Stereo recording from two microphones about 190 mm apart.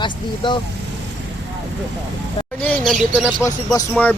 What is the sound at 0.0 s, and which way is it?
Speech, 25° left (ahead or behind).